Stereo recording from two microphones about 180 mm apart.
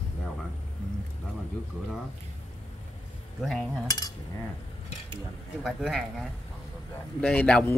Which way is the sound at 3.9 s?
20° left (ahead or behind).